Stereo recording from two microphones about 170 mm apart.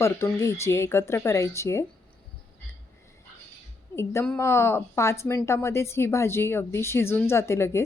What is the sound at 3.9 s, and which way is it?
A woman's voice, 15° left (ahead or behind).